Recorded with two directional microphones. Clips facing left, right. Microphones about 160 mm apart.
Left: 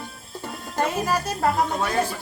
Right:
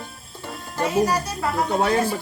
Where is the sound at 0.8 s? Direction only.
50° left (ahead or behind).